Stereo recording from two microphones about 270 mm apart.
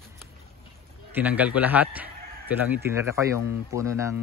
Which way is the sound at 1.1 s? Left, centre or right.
Centre.